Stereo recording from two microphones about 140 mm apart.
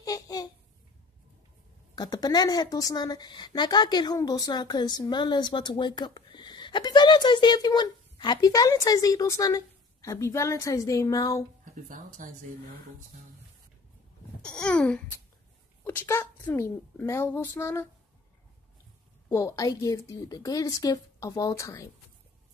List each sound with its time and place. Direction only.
0.0 s a sound: 25° left (ahead or behind)
2.0 s a woman's voice: 30° left (ahead or behind)
11.7 s speech: 65° right (ahead or behind)
14.4 s a sound: 5° left (ahead or behind)
15.8 s a woman's voice: 15° left (ahead or behind)
19.2 s a woman's voice: 20° left (ahead or behind)